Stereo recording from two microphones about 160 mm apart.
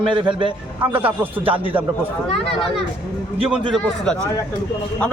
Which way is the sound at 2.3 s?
35° left (ahead or behind).